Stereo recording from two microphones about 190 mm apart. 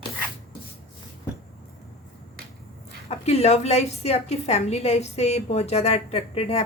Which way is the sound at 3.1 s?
35° left (ahead or behind).